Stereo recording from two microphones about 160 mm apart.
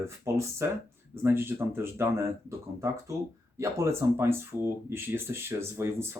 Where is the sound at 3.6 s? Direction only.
15° right (ahead or behind).